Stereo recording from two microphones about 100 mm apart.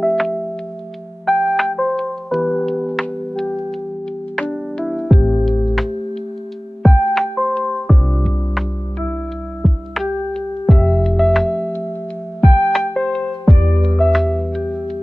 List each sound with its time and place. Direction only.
0.0 s music: centre (ahead or behind)
11.4 s music: 15° left (ahead or behind)
12.7 s music: 5° left (ahead or behind)